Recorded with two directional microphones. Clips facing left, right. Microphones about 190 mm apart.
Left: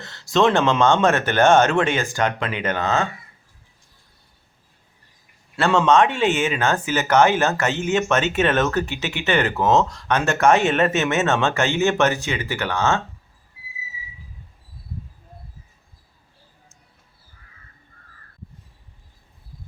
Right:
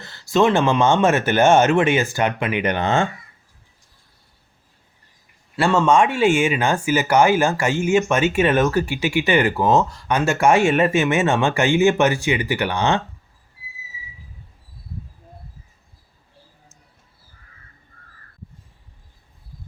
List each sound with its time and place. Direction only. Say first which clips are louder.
0.0 s speech: right 1 dB; centre (ahead or behind)
2.8 s speech: right 1 dB; 30° right (ahead or behind)
5.5 s speech: even; 10° right (ahead or behind)